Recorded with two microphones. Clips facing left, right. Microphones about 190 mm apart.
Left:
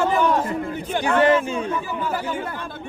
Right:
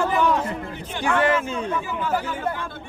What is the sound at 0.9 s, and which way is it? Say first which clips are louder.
Speech: left 2 dB; 40° left (ahead or behind).